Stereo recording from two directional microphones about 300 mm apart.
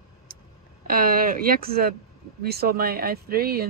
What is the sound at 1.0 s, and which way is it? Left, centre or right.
A woman's voice, right.